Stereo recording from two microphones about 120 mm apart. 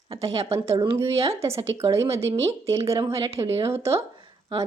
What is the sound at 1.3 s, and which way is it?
A woman's voice, 25° right (ahead or behind).